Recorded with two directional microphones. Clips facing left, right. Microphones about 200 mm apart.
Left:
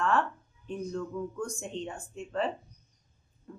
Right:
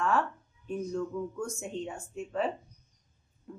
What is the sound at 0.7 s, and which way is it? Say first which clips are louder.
Speech: right 2 dB; 5° right (ahead or behind).